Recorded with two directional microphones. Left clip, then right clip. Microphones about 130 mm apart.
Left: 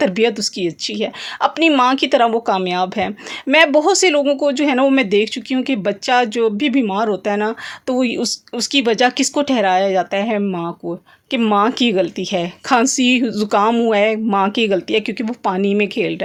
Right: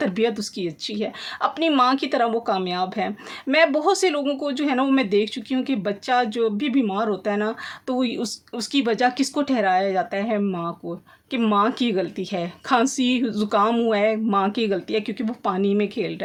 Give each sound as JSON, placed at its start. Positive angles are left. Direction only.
{"t": 0.0, "sound": "speech", "side_deg": 35}